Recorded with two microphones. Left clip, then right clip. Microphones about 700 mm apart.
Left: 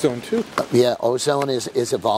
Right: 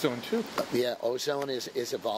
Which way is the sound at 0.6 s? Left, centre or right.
Left.